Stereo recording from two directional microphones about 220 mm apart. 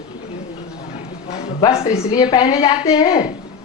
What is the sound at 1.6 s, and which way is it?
A woman's voice, 15° left (ahead or behind).